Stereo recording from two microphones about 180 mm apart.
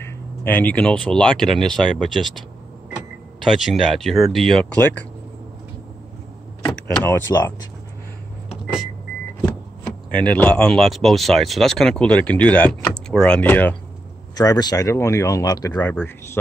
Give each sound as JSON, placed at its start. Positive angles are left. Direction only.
{"t": 0.0, "sound": "speech", "side_deg": 10}
{"t": 3.4, "sound": "speech", "side_deg": 0}
{"t": 6.7, "sound": "vehicle", "side_deg": 5}
{"t": 7.1, "sound": "speech", "side_deg": 15}
{"t": 9.8, "sound": "speech", "side_deg": 5}
{"t": 14.3, "sound": "speech", "side_deg": 20}